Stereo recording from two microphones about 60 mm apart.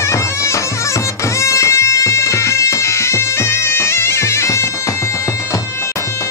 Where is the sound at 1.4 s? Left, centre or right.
Left.